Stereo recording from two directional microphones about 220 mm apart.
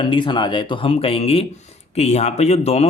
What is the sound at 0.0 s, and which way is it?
A man's voice, 20° left (ahead or behind).